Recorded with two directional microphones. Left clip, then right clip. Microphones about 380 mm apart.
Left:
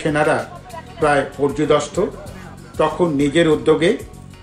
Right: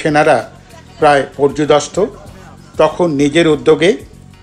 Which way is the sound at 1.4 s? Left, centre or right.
Centre.